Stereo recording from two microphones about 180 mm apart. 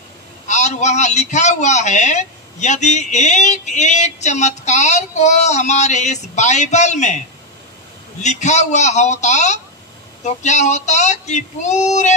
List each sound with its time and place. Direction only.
0.5 s a man's voice: 40° left (ahead or behind)
8.2 s a man's voice: 40° left (ahead or behind)